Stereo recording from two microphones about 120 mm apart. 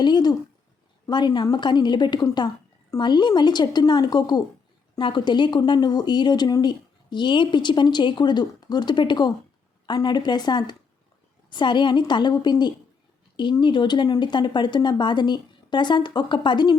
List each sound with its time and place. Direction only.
0.0 s speech: 35° left (ahead or behind)